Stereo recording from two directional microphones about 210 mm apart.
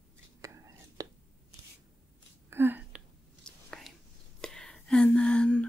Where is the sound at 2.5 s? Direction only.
10° right (ahead or behind).